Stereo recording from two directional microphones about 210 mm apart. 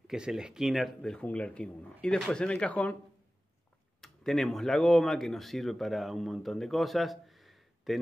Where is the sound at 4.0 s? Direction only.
Centre (ahead or behind).